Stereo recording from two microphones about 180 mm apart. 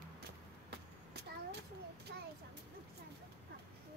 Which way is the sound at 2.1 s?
65° right (ahead or behind).